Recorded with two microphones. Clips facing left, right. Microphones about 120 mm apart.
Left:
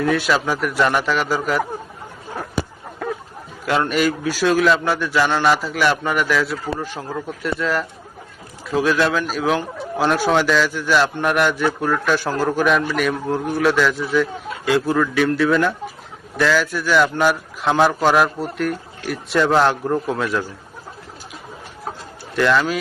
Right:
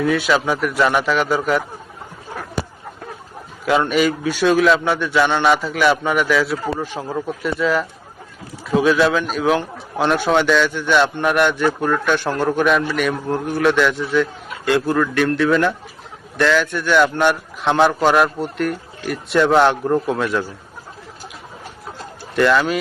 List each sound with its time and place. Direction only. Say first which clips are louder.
0.0 s a man's voice: right 1 dB; centre (ahead or behind)
3.0 s a sound: left 10 dB; 90° left
3.7 s a man's voice: right 2 dB; centre (ahead or behind)
22.4 s a man's voice: right 2 dB; centre (ahead or behind)